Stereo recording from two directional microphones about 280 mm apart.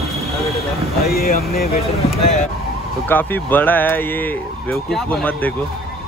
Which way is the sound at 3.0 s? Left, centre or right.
Centre.